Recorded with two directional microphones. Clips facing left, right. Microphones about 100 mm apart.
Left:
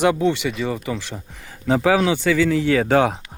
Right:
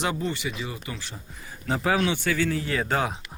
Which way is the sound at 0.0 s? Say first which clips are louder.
Left 10 dB; 80° left.